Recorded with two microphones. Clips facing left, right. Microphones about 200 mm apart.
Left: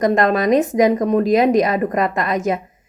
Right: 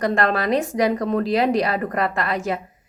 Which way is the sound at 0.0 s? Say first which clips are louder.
Left 5 dB; 20° left (ahead or behind).